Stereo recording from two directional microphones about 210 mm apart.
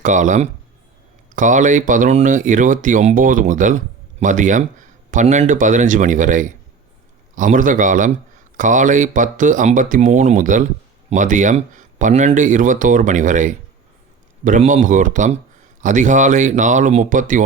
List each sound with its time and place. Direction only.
0.0 s speech: 35° right (ahead or behind)